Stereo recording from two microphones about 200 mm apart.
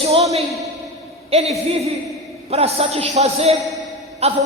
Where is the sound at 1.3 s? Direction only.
30° right (ahead or behind).